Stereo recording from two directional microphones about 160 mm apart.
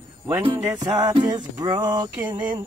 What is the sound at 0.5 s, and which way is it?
Music, 20° right (ahead or behind).